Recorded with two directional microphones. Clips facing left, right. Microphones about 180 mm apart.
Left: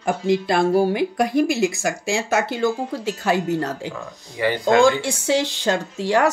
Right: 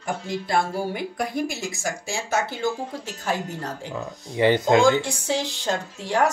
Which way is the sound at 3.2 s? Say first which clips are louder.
Left 7 dB; 80° left.